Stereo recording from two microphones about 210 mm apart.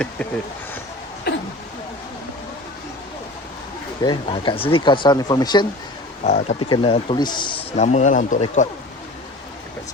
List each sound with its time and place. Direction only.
1.3 s a sound: 50° left (ahead or behind)
4.0 s speech: 20° left (ahead or behind)
6.2 s speech: 35° left (ahead or behind)
6.6 s speech: 25° left (ahead or behind)
7.8 s speech: 35° left (ahead or behind)